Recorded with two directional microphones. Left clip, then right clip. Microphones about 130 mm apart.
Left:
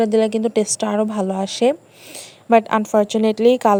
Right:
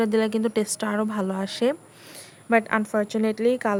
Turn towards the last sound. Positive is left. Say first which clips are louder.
# left 8 dB
turn(degrees=40)  # may be behind; listen again after turning